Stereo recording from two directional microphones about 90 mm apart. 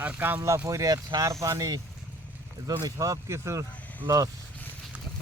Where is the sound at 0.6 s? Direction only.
40° right (ahead or behind).